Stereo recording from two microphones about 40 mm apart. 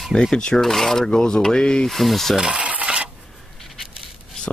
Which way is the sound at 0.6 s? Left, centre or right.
Centre.